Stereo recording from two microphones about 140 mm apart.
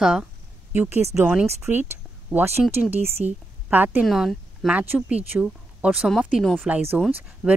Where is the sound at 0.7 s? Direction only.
15° right (ahead or behind).